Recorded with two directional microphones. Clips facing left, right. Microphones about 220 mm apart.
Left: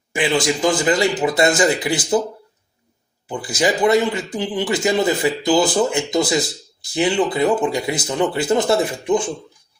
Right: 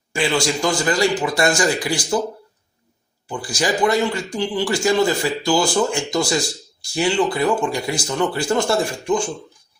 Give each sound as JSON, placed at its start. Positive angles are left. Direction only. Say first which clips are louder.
{"t": 0.1, "sound": "speech", "louder": "left 1 dB", "side_deg": 20}
{"t": 3.2, "sound": "speech", "louder": "left 3 dB", "side_deg": 20}